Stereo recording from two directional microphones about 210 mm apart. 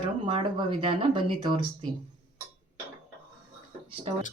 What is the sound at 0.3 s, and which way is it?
Speech, 25° right (ahead or behind).